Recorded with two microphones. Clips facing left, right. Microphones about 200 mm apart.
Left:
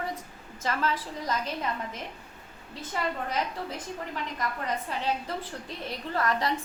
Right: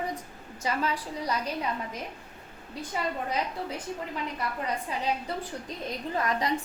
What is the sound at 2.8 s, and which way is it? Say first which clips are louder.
Speech: even; 15° right (ahead or behind).